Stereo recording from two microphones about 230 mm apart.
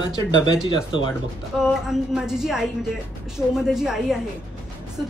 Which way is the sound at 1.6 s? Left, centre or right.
Centre.